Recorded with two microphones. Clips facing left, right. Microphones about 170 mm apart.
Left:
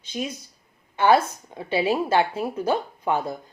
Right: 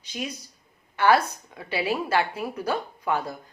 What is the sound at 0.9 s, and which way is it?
Speech, 20° left (ahead or behind).